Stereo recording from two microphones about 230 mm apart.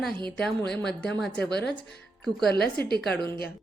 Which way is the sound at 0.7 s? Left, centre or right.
Centre.